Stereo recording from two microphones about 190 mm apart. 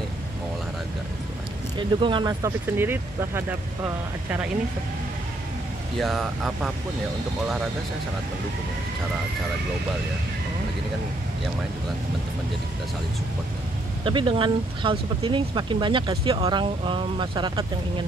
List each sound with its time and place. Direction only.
1.8 s speech: 25° right (ahead or behind); by 4.5 s 10° right (ahead or behind)
5.9 s speech: centre (ahead or behind)
14.0 s speech: 25° right (ahead or behind)